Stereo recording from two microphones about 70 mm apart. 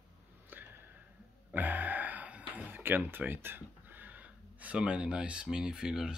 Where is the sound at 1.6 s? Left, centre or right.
Right.